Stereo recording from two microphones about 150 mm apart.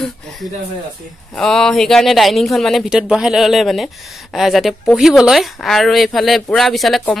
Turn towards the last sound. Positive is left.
turn(degrees=5)  # may be behind; listen again after turning